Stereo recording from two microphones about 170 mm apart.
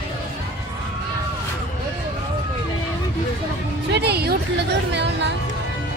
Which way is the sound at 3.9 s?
75° right (ahead or behind).